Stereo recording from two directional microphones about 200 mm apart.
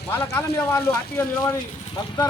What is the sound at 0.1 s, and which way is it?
A man's voice, 15° left (ahead or behind).